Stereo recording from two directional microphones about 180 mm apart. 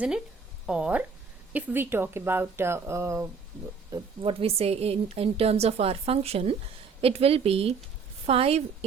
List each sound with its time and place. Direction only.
0.7 s speech: 5° right (ahead or behind)
3.9 s a woman's voice: 30° right (ahead or behind)